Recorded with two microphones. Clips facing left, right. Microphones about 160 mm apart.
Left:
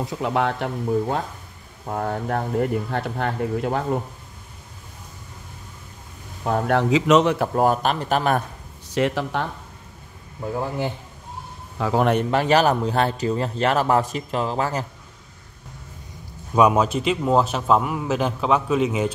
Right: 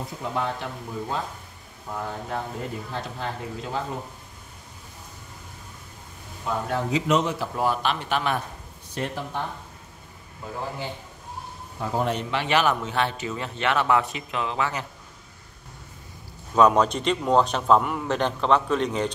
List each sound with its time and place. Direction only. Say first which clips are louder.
0.2 s speech: left 6 dB; 70° left (ahead or behind)
6.4 s a man's voice: left 7 dB; 65° left (ahead or behind); by 8.4 s 40° left (ahead or behind)
8.9 s speech: left 8 dB; 90° left
11.8 s a man's voice: left 6 dB; 80° left; by 14.9 s 40° left (ahead or behind)
16.5 s a man's voice: left 1 dB; 10° left (ahead or behind)